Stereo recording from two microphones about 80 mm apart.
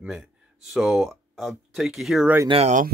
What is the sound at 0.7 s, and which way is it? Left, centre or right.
Speech, centre.